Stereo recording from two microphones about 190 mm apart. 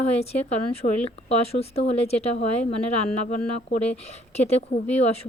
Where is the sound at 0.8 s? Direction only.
45° left (ahead or behind).